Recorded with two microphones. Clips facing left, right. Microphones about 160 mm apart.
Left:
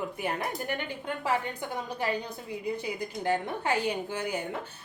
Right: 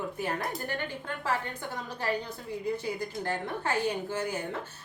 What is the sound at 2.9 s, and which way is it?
A woman's voice, 15° left (ahead or behind).